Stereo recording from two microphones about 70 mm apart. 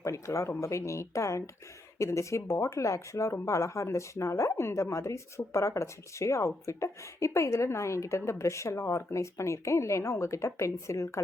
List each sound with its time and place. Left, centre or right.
0.0 s speech: left